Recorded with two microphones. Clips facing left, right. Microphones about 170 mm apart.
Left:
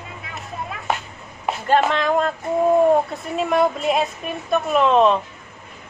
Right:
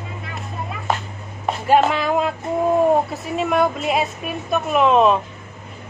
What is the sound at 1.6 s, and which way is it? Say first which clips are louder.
Speech: right 2 dB; 10° right (ahead or behind).